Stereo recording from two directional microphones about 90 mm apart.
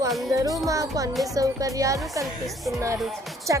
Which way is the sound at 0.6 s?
40° right (ahead or behind).